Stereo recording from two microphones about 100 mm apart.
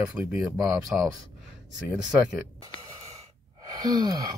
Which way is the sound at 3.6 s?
40° right (ahead or behind).